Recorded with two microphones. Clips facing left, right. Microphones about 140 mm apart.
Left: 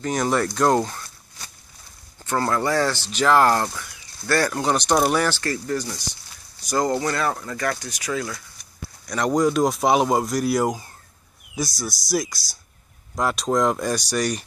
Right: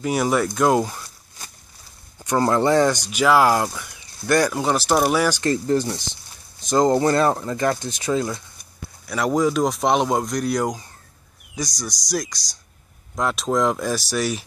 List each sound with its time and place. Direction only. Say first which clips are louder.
0.0 s speech: right 2 dB; 10° right (ahead or behind)
2.1 s speech: right 4 dB; 15° right (ahead or behind)
5.4 s speech: right 6 dB; 25° right (ahead or behind)
9.0 s speech: even; 5° right (ahead or behind)
12.1 s speech: left 2 dB; 5° left (ahead or behind)